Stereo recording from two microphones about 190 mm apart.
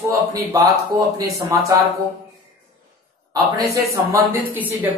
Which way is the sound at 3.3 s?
20° right (ahead or behind).